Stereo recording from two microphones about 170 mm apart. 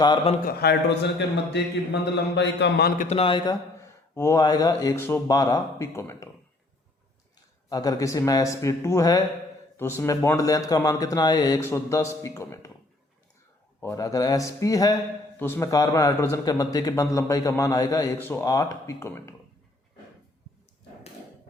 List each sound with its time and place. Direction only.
0.4 s a man's voice: 70° left (ahead or behind)
3.0 s a man's voice: 40° left (ahead or behind)
4.1 s a man's voice: 15° left (ahead or behind)
7.7 s a man's voice: 20° left (ahead or behind)
13.8 s a man's voice: 20° left (ahead or behind)